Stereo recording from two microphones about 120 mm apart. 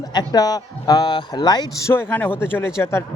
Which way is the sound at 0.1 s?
35° left (ahead or behind).